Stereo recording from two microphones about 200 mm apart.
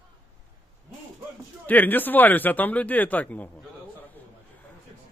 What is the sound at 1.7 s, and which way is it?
A man's voice, 10° left (ahead or behind).